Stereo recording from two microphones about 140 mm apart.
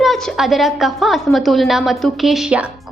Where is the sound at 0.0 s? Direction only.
Centre (ahead or behind).